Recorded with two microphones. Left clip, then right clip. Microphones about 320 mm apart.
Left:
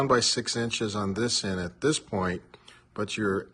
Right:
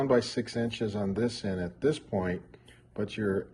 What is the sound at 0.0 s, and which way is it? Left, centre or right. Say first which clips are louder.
Speech: left 3 dB; centre.